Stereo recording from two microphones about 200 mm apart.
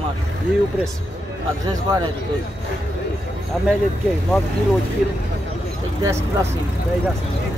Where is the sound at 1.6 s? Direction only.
20° right (ahead or behind).